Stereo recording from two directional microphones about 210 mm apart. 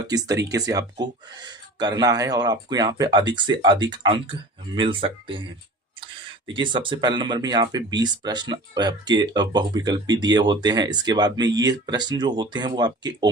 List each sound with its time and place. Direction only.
0.1 s speech: 15° right (ahead or behind)
6.5 s speech: 25° right (ahead or behind)